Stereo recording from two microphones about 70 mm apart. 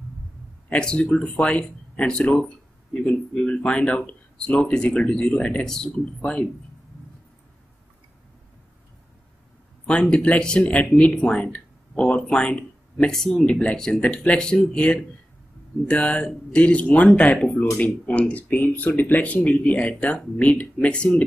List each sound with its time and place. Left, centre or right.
0.7 s speech: centre
9.8 s speech: centre
17.7 s speech: left